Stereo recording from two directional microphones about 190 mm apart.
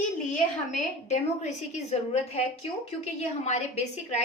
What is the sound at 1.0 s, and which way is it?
A woman's voice, 40° left (ahead or behind).